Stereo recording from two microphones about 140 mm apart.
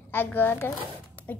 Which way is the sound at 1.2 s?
10° left (ahead or behind).